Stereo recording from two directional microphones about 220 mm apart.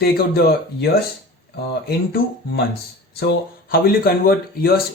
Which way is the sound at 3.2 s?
45° left (ahead or behind).